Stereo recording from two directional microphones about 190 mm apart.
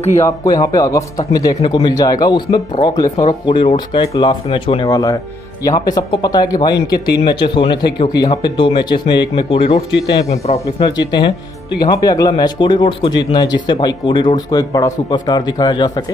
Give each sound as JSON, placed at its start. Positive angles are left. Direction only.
{"t": 0.2, "sound": "speech", "side_deg": 20}
{"t": 11.0, "sound": "speech", "side_deg": 25}